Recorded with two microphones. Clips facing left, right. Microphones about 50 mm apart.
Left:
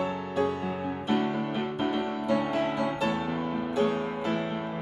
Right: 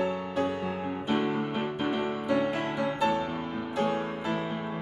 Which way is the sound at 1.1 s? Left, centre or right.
Centre.